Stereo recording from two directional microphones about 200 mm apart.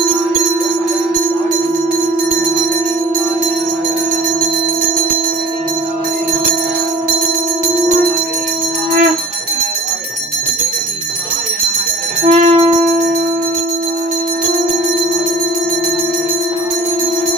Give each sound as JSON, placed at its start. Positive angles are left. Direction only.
{"t": 12.3, "sound": "music", "side_deg": -30}